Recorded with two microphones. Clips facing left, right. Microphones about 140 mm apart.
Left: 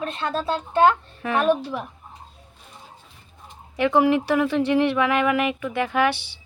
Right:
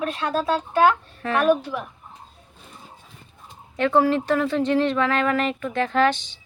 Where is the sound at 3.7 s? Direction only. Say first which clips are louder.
Left 1 dB; 15° left (ahead or behind).